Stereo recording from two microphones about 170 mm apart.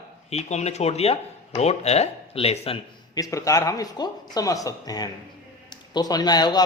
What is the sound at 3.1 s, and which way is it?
Speech, 20° left (ahead or behind).